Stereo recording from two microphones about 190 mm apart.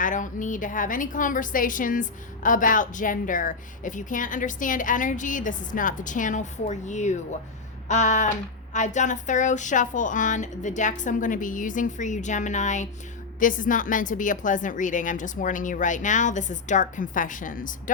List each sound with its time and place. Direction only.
0.0 s a woman's voice: 45° left (ahead or behind)